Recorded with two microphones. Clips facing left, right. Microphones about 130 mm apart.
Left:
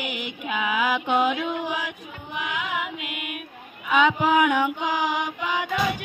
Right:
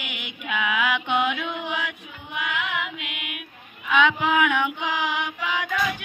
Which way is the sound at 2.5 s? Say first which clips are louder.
Even; 35° left (ahead or behind).